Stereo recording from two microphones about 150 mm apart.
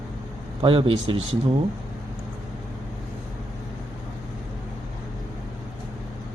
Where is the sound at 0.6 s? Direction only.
35° right (ahead or behind).